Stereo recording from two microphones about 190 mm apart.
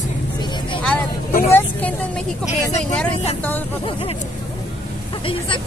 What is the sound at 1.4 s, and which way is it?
Speech, 10° left (ahead or behind).